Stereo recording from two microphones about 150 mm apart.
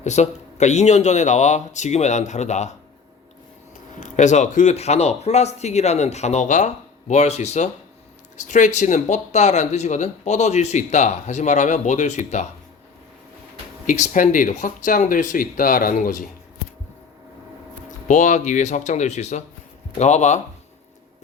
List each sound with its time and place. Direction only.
0.0 s speech: 50° left (ahead or behind)
3.9 s speech: 55° left (ahead or behind)
13.8 s speech: 55° left (ahead or behind)
18.1 s speech: 55° left (ahead or behind)